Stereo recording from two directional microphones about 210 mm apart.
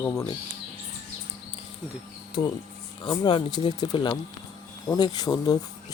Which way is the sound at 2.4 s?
20° left (ahead or behind).